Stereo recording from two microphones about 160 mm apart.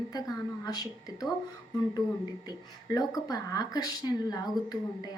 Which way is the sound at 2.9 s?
25° left (ahead or behind).